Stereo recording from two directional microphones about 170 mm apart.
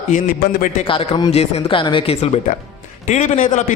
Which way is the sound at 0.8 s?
30° left (ahead or behind).